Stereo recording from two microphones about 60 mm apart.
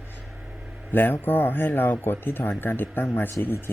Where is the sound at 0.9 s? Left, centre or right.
Left.